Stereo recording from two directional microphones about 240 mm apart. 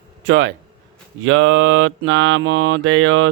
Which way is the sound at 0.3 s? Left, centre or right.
Right.